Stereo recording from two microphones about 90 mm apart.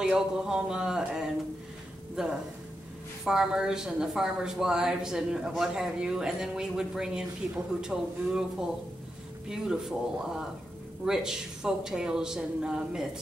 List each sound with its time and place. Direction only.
0.0 s speech: 5° right (ahead or behind)